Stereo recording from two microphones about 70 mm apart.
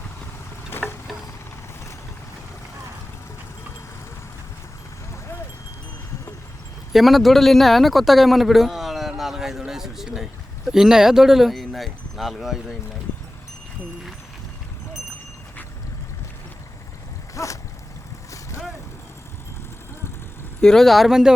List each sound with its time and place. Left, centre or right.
0.7 s boat: left
6.9 s speech: centre
17.3 s a sound: left
20.6 s speech: centre